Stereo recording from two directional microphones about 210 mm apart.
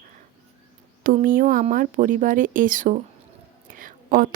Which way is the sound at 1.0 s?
40° right (ahead or behind).